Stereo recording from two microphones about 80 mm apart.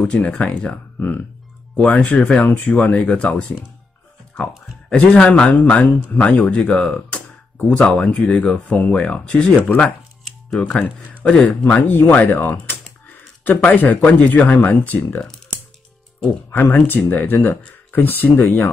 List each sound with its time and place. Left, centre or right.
0.0 s speech: centre
0.9 s speech: left
1.8 s speech: centre
4.8 s speech: centre
16.4 s speech: left